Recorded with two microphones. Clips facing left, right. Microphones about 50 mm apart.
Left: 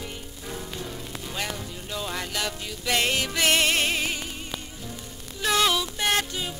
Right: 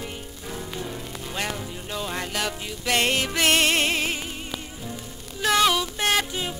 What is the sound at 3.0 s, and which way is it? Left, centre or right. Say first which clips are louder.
Music: right 2 dB; right.